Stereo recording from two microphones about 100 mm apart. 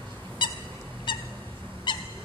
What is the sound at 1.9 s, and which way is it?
Owl, 50° left (ahead or behind).